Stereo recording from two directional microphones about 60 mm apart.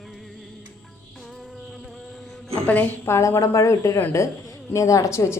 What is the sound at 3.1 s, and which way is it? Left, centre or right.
A woman's voice, left.